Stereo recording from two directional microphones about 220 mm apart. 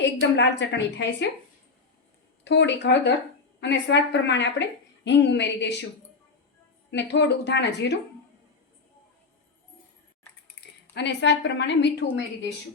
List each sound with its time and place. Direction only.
0.0 s a woman's voice: 55° left (ahead or behind)
2.4 s a woman's voice: 50° left (ahead or behind)
6.9 s a woman's voice: 50° left (ahead or behind)
10.9 s a woman's voice: 50° left (ahead or behind)